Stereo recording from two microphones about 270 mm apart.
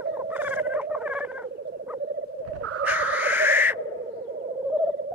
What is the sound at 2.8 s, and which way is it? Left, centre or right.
Owl, centre.